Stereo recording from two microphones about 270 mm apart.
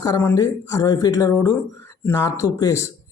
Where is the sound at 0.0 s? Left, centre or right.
Centre.